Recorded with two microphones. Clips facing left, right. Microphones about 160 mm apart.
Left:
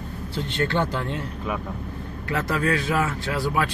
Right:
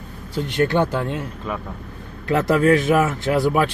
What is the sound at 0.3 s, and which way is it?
Speech, 15° right (ahead or behind).